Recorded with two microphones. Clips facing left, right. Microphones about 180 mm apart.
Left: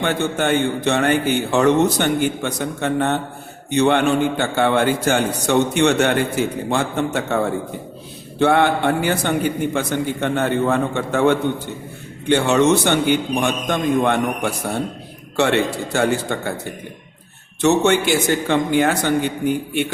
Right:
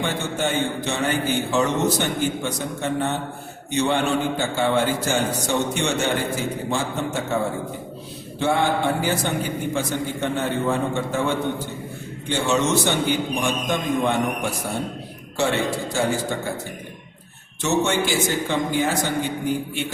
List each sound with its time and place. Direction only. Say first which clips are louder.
0.0 s a man's voice: left 5 dB; 60° left (ahead or behind)
8.4 s a man's voice: left 5 dB; 60° left (ahead or behind)
17.6 s a man's voice: left 6 dB; 60° left (ahead or behind)